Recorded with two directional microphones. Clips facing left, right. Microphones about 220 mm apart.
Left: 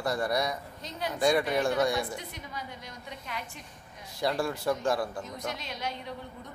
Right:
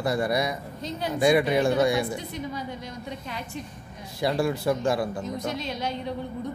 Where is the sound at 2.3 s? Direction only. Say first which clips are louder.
Right 9 dB; 30° right (ahead or behind).